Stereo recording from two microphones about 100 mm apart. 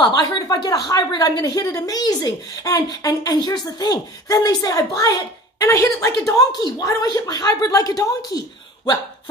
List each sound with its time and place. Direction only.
0.0 s speech: 40° left (ahead or behind)